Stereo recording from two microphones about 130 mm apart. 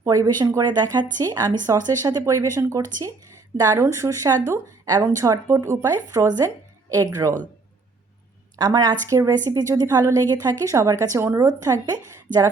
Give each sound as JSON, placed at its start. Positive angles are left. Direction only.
{"t": 0.0, "sound": "speech", "side_deg": -25}
{"t": 8.5, "sound": "speech", "side_deg": -30}